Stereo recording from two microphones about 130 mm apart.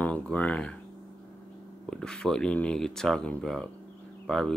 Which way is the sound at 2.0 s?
5° left (ahead or behind).